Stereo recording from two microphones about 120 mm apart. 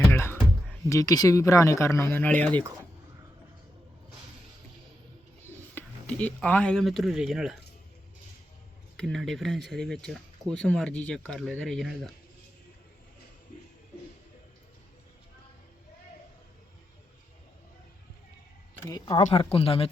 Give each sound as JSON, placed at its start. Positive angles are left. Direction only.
{"t": 0.1, "sound": "speech", "side_deg": 20}
{"t": 5.7, "sound": "speech", "side_deg": 10}
{"t": 9.0, "sound": "speech", "side_deg": 5}
{"t": 18.9, "sound": "speech", "side_deg": 30}
{"t": 19.3, "sound": "speech", "side_deg": 50}